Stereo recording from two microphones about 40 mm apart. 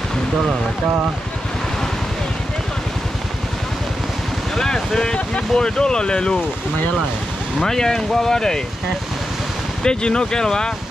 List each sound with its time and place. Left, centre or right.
4.6 s speech: centre
7.6 s speech: centre
9.8 s speech: centre